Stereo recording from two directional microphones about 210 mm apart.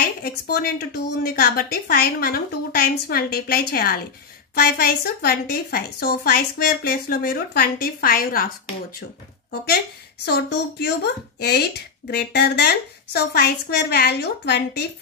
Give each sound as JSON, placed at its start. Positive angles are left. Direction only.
{"t": 0.2, "sound": "a woman's voice", "side_deg": 50}
{"t": 10.2, "sound": "a woman's voice", "side_deg": 50}